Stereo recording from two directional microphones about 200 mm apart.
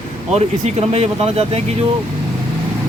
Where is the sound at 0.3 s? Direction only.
30° right (ahead or behind).